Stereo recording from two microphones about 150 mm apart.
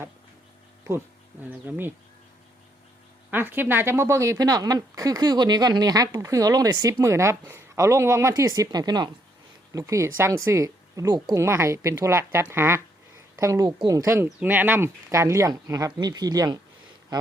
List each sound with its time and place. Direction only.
0.9 s speech: 15° right (ahead or behind)
3.2 s speech: 15° right (ahead or behind)
17.1 s a sound: 30° right (ahead or behind)